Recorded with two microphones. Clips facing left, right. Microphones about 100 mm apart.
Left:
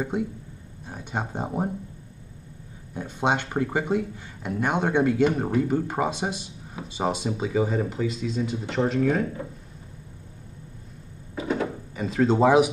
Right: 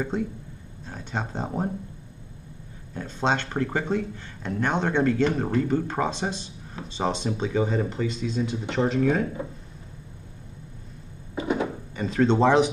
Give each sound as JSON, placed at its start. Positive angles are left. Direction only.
{"t": 0.0, "sound": "speech", "side_deg": 15}
{"t": 2.9, "sound": "speech", "side_deg": 15}
{"t": 11.4, "sound": "a sound", "side_deg": -20}
{"t": 11.9, "sound": "speech", "side_deg": 5}